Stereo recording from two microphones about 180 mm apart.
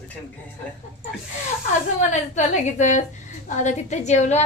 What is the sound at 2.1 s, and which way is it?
A woman's voice, 40° left (ahead or behind).